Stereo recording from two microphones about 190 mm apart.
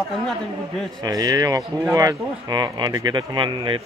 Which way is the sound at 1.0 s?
20° right (ahead or behind).